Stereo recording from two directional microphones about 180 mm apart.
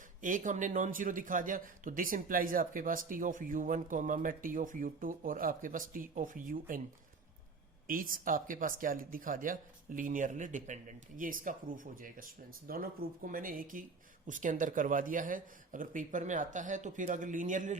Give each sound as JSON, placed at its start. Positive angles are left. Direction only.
{"t": 0.2, "sound": "a man's voice", "side_deg": -45}
{"t": 7.9, "sound": "a man's voice", "side_deg": -50}